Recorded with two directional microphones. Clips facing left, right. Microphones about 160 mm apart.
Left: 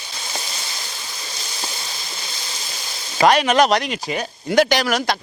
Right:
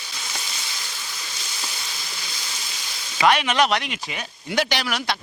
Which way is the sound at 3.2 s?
40° left (ahead or behind).